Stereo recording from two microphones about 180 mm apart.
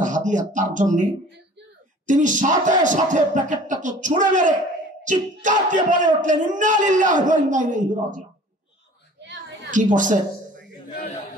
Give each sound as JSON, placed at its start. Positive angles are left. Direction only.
{"t": 0.0, "sound": "speech", "side_deg": -45}
{"t": 2.0, "sound": "speech", "side_deg": -45}
{"t": 9.9, "sound": "speech", "side_deg": -45}